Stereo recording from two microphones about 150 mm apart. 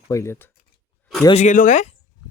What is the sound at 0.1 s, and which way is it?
Speech, 20° left (ahead or behind).